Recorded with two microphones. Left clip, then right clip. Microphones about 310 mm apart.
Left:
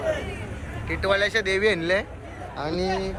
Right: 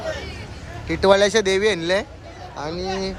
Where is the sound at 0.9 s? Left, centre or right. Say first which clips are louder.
Right 7 dB; right.